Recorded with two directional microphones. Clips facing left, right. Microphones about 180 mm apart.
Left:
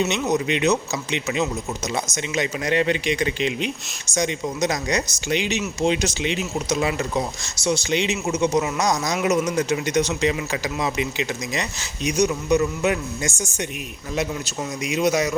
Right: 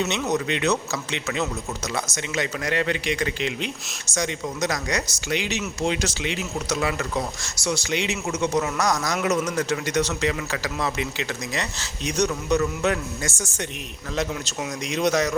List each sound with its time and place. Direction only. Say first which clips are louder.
0.0 s speech: left 3 dB; 15° left (ahead or behind)